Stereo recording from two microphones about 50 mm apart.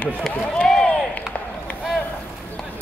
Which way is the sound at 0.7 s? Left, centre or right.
Centre.